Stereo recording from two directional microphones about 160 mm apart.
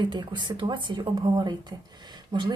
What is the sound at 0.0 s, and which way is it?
Speech, 25° right (ahead or behind).